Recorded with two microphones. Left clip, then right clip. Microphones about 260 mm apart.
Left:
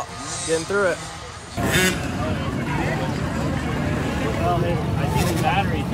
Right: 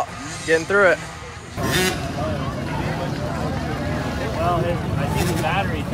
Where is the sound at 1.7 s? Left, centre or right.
Right.